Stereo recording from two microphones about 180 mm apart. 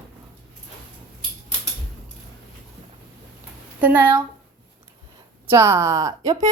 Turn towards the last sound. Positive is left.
turn(degrees=-20)  # may be behind; listen again after turning